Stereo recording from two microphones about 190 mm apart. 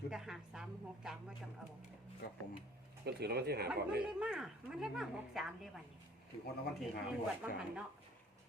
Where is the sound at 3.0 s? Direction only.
60° right (ahead or behind).